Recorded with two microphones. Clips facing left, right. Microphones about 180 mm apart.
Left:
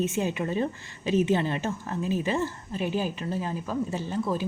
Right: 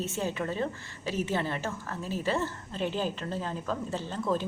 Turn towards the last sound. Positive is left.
turn(degrees=10)  # may be behind; listen again after turning